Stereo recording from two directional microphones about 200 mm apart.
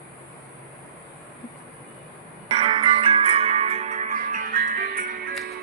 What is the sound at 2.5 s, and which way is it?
Music, 30° right (ahead or behind).